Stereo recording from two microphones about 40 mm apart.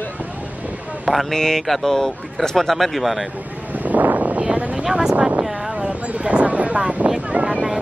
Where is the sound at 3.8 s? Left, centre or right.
Right.